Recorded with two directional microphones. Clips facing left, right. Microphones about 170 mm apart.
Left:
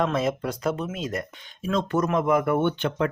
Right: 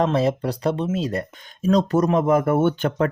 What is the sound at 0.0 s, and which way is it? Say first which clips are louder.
Speech: right 4 dB; 35° right (ahead or behind).